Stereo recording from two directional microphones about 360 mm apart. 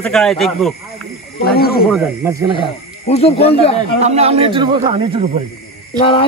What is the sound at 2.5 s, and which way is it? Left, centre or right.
Speech, centre.